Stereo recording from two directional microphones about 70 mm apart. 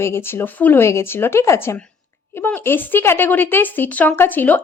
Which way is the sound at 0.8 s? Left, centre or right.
Left.